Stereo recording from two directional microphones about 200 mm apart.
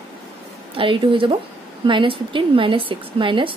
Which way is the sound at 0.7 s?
25° right (ahead or behind).